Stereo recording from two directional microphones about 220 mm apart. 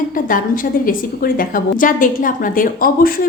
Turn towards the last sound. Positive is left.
turn(degrees=40)  # may be behind; listen again after turning